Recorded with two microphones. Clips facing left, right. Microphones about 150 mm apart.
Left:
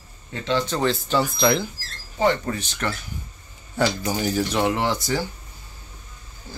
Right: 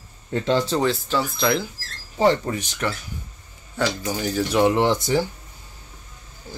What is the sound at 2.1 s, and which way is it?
Speech, 30° right (ahead or behind).